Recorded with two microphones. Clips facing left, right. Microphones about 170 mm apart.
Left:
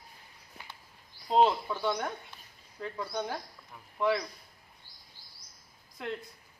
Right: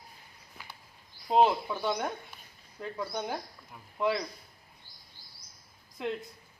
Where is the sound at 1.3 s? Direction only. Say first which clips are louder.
Right 1 dB; 15° right (ahead or behind).